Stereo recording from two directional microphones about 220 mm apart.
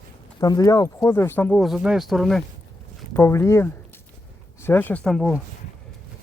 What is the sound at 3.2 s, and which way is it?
Speech, 10° left (ahead or behind).